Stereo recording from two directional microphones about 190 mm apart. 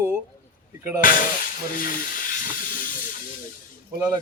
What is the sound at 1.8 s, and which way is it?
Hiss, 45° left (ahead or behind).